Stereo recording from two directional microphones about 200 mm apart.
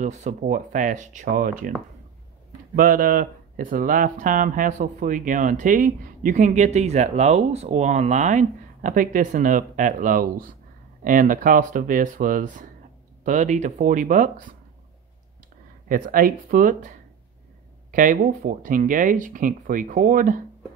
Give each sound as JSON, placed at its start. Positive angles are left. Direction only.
{"t": 0.0, "sound": "speech", "side_deg": -35}
{"t": 2.7, "sound": "speech", "side_deg": -45}
{"t": 15.9, "sound": "speech", "side_deg": -45}
{"t": 17.9, "sound": "speech", "side_deg": -40}